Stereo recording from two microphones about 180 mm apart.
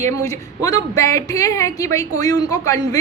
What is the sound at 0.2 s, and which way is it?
A woman's voice, 20° left (ahead or behind).